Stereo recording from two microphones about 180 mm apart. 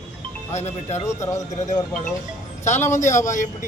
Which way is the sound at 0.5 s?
40° left (ahead or behind).